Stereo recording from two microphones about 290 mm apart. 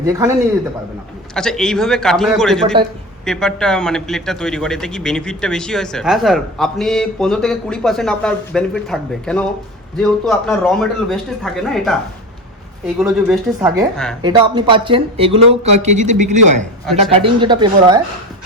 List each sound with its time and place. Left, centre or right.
0.0 s speech: centre
1.3 s a man's voice: centre
13.0 s a man's voice: centre
14.2 s speech: centre